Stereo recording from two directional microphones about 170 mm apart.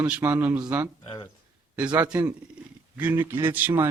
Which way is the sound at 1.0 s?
25° left (ahead or behind).